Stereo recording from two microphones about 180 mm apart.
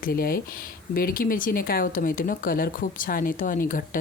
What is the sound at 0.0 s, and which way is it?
Speech, 55° left (ahead or behind).